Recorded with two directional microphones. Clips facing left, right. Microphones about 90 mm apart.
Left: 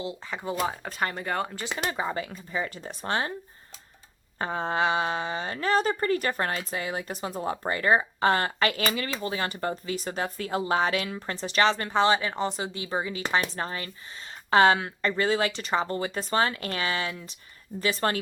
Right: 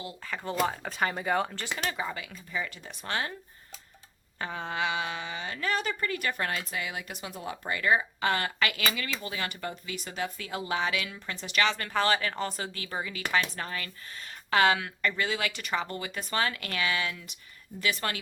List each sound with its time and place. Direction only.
0.0 s speech: 20° left (ahead or behind)
0.4 s speech: 5° left (ahead or behind)
1.8 s a woman's voice: 30° left (ahead or behind)
4.4 s a woman's voice: 35° left (ahead or behind)